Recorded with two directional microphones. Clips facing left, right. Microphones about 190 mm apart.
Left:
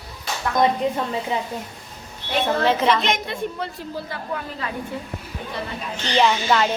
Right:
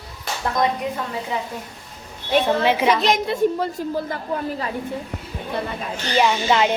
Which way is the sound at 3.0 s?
40° right (ahead or behind).